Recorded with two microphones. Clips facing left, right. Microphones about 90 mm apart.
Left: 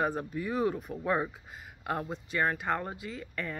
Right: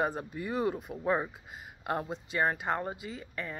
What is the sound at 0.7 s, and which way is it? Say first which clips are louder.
Speech: even; 15° right (ahead or behind).